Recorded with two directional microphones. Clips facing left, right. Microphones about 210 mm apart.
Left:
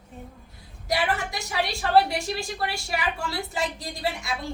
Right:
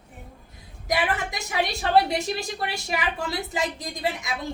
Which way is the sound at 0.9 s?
20° right (ahead or behind).